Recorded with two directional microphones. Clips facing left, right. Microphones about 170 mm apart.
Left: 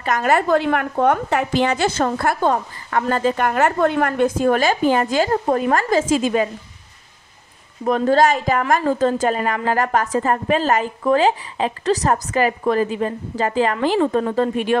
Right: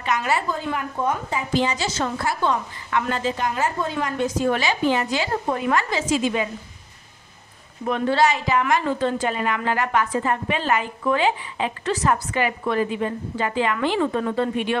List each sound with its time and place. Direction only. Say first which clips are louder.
0.0 s a woman's voice: left 5 dB; 50° left (ahead or behind)
7.8 s a woman's voice: left 4 dB; 40° left (ahead or behind)